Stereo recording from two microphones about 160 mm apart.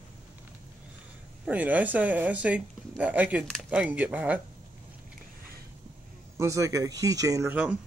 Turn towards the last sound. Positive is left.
turn(degrees=-10)  # may be behind; listen again after turning